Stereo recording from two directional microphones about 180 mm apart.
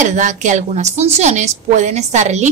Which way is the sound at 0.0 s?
45° right (ahead or behind).